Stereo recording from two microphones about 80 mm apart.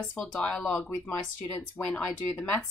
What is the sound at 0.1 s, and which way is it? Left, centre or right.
Speech, centre.